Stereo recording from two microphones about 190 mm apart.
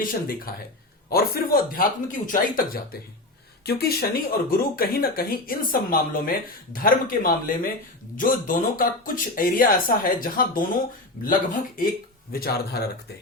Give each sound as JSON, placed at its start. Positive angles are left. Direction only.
{"t": 0.0, "sound": "speech", "side_deg": 50}